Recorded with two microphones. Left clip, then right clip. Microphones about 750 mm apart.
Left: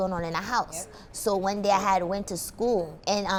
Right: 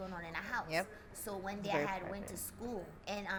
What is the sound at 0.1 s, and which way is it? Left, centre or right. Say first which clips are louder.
A woman's voice: left 13 dB; left.